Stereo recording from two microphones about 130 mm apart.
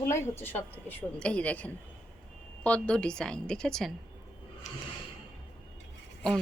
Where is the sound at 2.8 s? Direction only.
5° left (ahead or behind).